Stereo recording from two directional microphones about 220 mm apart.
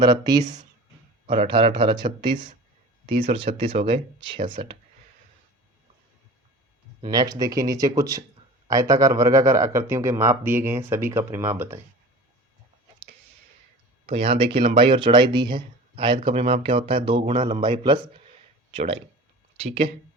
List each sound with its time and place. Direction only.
0.0 s speech: 20° right (ahead or behind)
7.0 s a man's voice: 15° right (ahead or behind)
14.1 s speech: 25° right (ahead or behind)